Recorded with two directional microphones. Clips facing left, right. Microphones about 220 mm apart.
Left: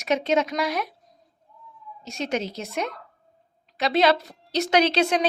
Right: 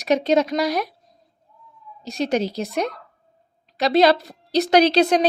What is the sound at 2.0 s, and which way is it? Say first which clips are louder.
Speech: right 6 dB; 35° right (ahead or behind).